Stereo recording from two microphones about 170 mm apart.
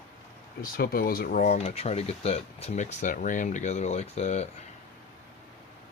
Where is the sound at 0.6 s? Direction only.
60° left (ahead or behind); by 4.4 s 40° left (ahead or behind).